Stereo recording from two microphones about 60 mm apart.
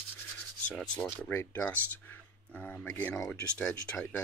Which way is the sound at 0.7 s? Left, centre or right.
Left.